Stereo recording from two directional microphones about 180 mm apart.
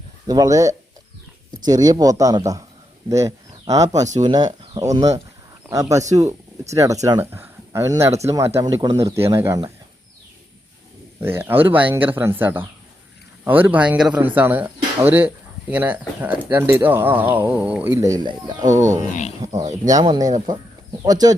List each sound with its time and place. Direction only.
0.3 s speech: 20° right (ahead or behind)
11.2 s speech: 15° right (ahead or behind)
18.6 s speech: 45° right (ahead or behind)
19.4 s speech: 20° right (ahead or behind)